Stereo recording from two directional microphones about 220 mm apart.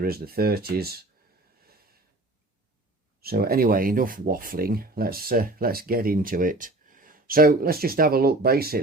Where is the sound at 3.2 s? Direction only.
45° right (ahead or behind).